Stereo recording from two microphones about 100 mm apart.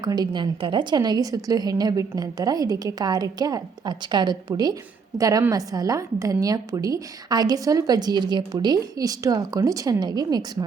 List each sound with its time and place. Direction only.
0.0 s a woman's voice: 45° right (ahead or behind)